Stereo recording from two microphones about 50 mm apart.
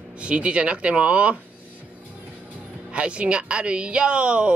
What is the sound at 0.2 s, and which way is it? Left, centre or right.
A woman's voice, right.